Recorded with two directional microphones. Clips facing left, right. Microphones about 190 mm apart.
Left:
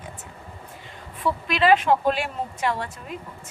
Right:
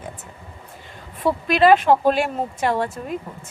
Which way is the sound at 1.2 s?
45° right (ahead or behind).